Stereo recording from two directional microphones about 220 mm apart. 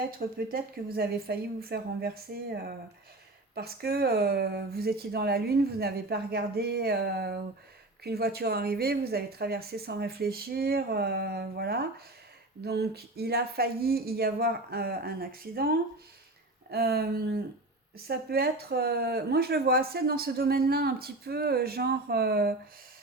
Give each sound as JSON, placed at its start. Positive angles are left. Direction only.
{"t": 0.2, "sound": "speech", "side_deg": -40}
{"t": 16.7, "sound": "speech", "side_deg": -45}